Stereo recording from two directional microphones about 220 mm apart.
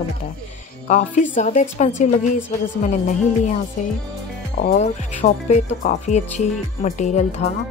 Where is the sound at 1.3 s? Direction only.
35° left (ahead or behind).